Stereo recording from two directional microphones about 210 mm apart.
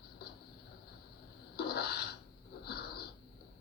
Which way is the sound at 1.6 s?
50° left (ahead or behind).